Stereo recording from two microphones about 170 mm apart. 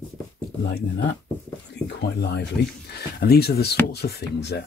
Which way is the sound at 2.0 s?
75° left (ahead or behind).